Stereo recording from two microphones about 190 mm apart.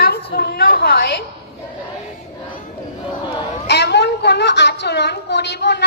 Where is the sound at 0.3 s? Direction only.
55° left (ahead or behind).